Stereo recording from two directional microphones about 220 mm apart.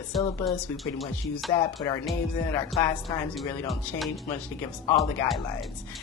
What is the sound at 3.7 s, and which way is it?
Speech, centre (ahead or behind).